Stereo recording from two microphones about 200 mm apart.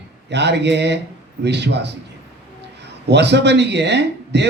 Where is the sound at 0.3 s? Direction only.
60° right (ahead or behind).